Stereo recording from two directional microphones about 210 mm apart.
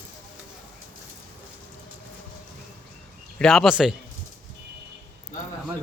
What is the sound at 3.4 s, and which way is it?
Speech, centre (ahead or behind).